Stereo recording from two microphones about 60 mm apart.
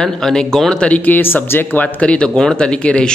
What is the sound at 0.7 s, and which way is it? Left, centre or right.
Speech, left.